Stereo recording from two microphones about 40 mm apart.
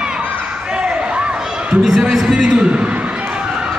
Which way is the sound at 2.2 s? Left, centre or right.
Right.